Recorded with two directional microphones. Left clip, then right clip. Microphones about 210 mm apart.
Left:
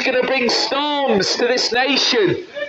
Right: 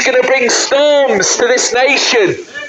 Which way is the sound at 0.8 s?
25° left (ahead or behind).